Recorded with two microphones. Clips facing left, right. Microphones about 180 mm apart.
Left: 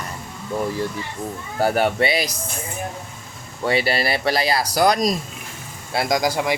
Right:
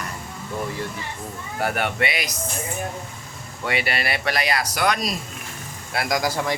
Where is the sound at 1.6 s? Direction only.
35° left (ahead or behind).